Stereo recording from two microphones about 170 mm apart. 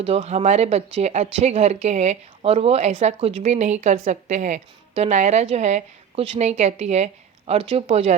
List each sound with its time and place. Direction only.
0.0 s speech: 40° right (ahead or behind)